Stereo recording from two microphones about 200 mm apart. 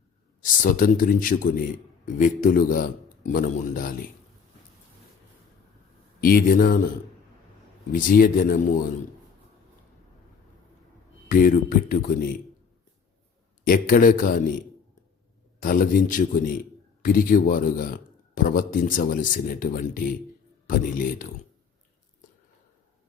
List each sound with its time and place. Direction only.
0.4 s speech: 45° left (ahead or behind)
6.1 s speech: 45° left (ahead or behind)
7.9 s speech: 45° left (ahead or behind)
11.3 s speech: 45° left (ahead or behind)
13.7 s speech: 45° left (ahead or behind)
15.6 s speech: 45° left (ahead or behind)